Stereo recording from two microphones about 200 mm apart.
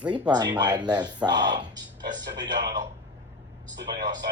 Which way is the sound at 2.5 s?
60° right (ahead or behind).